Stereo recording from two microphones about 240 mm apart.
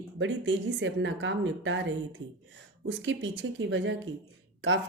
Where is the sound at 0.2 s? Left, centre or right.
Right.